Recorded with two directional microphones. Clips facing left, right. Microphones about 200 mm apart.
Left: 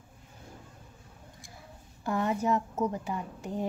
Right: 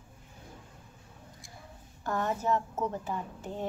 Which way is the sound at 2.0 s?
15° left (ahead or behind).